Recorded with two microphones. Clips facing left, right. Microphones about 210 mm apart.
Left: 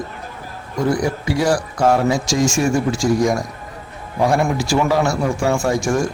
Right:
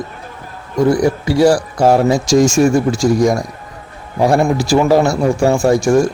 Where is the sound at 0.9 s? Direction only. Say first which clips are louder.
Right 5 dB; 35° right (ahead or behind).